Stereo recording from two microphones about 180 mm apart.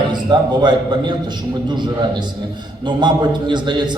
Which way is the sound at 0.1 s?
25° right (ahead or behind).